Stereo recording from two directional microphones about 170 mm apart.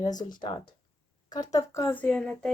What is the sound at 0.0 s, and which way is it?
Speech, 25° left (ahead or behind).